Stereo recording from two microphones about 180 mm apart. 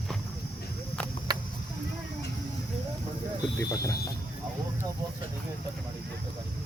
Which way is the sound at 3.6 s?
15° left (ahead or behind).